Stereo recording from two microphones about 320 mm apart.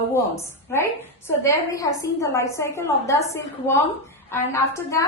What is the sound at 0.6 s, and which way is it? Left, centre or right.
A woman's voice, centre.